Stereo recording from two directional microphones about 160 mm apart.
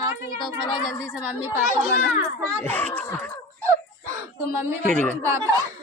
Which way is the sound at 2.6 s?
10° left (ahead or behind).